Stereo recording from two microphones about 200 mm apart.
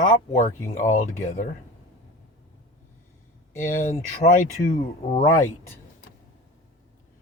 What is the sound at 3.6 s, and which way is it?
Speech, 40° left (ahead or behind).